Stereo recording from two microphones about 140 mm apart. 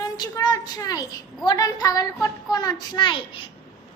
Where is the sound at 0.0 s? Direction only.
30° left (ahead or behind).